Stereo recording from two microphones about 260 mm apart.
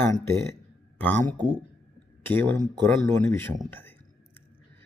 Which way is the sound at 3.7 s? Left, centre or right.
Centre.